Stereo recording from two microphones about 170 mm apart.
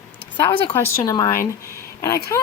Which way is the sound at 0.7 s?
15° left (ahead or behind).